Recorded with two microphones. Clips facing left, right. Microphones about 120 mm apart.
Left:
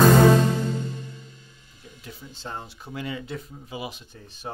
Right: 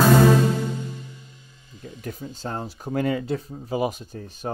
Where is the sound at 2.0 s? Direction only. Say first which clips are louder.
Right 9 dB; 50° right (ahead or behind).